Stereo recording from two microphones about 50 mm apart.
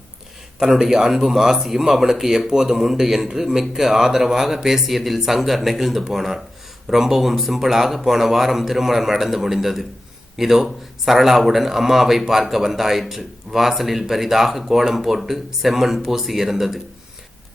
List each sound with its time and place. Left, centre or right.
0.6 s speech: centre